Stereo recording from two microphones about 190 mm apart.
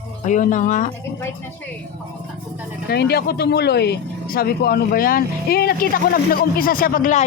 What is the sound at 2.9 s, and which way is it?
Speech, 55° left (ahead or behind).